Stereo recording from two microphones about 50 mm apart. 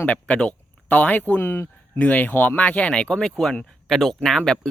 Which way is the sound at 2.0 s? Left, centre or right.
Left.